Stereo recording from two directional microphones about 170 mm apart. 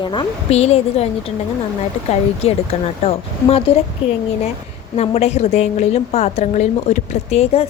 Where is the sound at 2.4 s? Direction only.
40° left (ahead or behind).